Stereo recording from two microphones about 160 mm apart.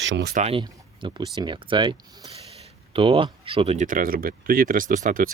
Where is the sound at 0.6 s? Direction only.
30° right (ahead or behind).